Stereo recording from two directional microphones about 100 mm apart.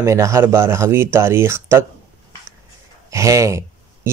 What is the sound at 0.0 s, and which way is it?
A man's voice, 30° right (ahead or behind).